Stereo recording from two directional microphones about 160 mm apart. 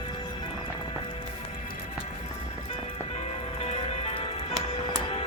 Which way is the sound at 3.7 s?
40° left (ahead or behind).